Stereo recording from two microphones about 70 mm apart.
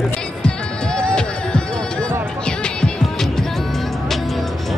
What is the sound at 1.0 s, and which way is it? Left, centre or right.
Music, centre.